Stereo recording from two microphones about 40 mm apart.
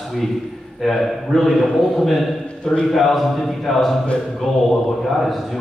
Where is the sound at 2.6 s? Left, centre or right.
Centre.